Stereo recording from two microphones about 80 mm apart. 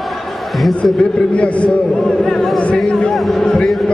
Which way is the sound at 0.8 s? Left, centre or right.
Centre.